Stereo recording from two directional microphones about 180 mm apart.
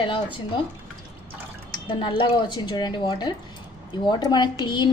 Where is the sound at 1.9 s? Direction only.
25° left (ahead or behind).